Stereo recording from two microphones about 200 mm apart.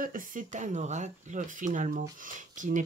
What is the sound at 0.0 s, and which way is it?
Speech, 45° right (ahead or behind).